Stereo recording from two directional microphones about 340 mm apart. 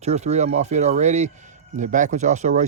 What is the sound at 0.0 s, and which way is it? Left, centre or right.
Speech, centre.